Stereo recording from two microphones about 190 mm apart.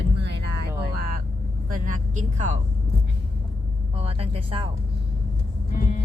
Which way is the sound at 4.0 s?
30° right (ahead or behind).